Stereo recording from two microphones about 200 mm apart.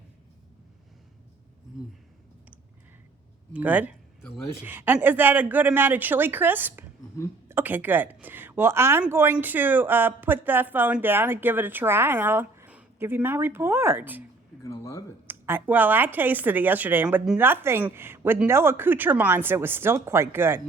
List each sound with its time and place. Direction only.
3.5 s a woman's voice: 5° right (ahead or behind)
14.6 s a sound: 15° left (ahead or behind)
15.3 s a woman's voice: 10° right (ahead or behind)